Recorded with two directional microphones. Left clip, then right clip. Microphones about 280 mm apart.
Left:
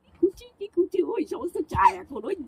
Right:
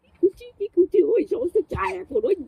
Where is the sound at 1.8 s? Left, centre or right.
Centre.